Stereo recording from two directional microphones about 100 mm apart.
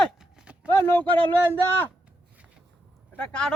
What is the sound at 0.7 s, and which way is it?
A man's voice, 20° left (ahead or behind).